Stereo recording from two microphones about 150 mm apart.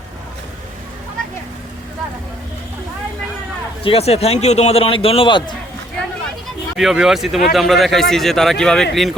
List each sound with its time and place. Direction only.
3.8 s a man's voice: 40° left (ahead or behind)
6.7 s speech: centre (ahead or behind)